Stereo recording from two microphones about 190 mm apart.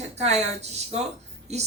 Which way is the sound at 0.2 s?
35° right (ahead or behind).